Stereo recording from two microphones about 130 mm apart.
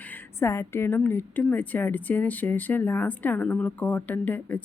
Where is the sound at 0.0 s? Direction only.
15° left (ahead or behind).